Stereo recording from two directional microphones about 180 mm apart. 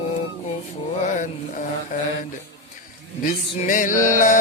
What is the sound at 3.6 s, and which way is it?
Music, 45° left (ahead or behind).